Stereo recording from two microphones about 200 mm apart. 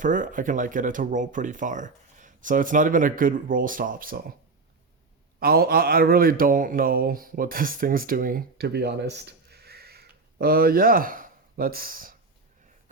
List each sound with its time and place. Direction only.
0.0 s speech: 40° right (ahead or behind)
5.4 s speech: 50° right (ahead or behind)